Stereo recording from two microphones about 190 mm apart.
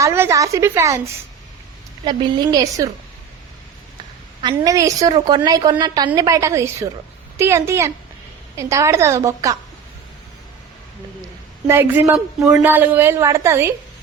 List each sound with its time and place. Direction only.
0.0 s a woman's voice: 15° right (ahead or behind)
4.4 s a woman's voice: 20° right (ahead or behind)
11.7 s a woman's voice: 10° right (ahead or behind)